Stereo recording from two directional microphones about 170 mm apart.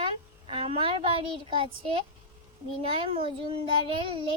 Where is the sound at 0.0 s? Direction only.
35° right (ahead or behind).